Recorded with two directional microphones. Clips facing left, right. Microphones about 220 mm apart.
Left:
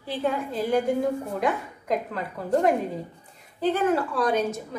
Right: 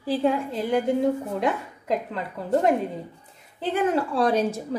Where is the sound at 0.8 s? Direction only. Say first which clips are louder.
Right 2 dB; 25° right (ahead or behind).